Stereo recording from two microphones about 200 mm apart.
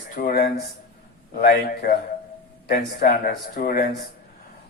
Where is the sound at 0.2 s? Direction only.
45° left (ahead or behind).